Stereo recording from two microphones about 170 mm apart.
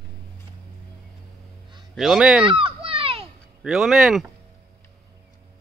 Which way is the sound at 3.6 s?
5° right (ahead or behind).